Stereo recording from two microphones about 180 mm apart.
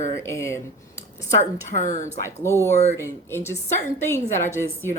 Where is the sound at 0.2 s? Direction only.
15° left (ahead or behind).